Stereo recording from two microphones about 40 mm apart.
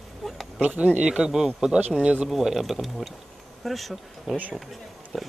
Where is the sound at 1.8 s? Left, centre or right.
Right.